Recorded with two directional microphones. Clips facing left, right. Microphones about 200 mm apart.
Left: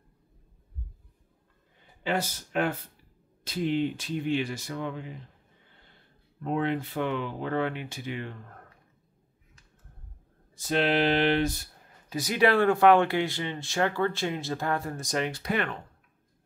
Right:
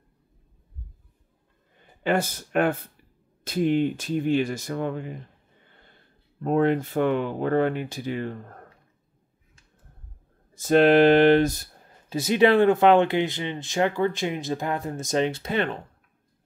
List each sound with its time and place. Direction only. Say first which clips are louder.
2.0 s speech: right 5 dB; 55° right (ahead or behind)
6.4 s speech: right 7 dB; 45° right (ahead or behind)
10.5 s speech: right 9 dB; 45° right (ahead or behind)
12.1 s speech: right 5 dB; 25° right (ahead or behind)